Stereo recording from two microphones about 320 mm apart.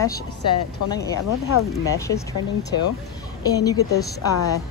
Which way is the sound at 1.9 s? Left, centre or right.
Centre.